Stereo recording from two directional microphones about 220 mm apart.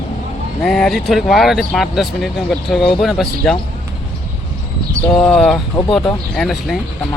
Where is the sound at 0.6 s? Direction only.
Centre (ahead or behind).